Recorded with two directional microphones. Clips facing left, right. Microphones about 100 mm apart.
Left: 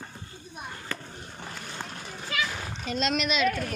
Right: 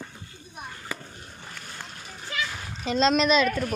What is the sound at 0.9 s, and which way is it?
Skateboard, 10° right (ahead or behind).